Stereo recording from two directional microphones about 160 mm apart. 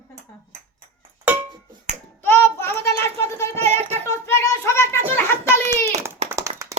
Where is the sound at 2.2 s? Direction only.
15° left (ahead or behind).